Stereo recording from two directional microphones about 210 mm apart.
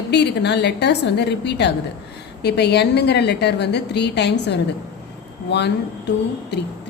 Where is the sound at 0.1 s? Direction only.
55° left (ahead or behind).